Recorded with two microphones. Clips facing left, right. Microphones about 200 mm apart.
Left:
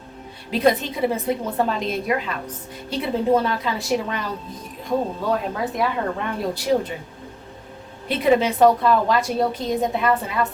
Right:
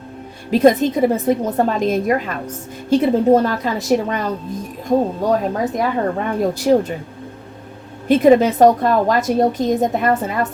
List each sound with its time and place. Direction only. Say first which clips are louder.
0.5 s a woman's voice: right 7 dB; 45° right (ahead or behind)
8.0 s a woman's voice: right 7 dB; 45° right (ahead or behind)